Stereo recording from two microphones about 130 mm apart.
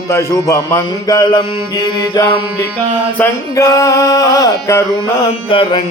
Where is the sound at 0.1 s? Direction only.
25° left (ahead or behind).